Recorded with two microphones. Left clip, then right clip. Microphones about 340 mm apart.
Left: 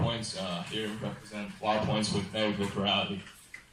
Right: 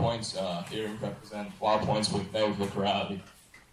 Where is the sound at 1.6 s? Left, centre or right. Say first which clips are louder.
Right 3 dB; right.